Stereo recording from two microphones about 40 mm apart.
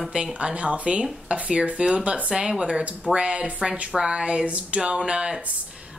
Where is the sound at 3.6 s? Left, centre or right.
Centre.